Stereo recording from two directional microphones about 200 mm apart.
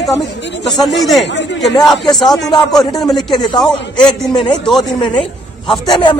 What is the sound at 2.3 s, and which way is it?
A man's voice, 20° left (ahead or behind).